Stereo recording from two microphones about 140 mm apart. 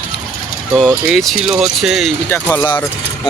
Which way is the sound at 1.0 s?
Centre (ahead or behind).